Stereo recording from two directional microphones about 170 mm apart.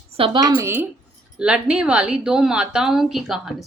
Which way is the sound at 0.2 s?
20° right (ahead or behind).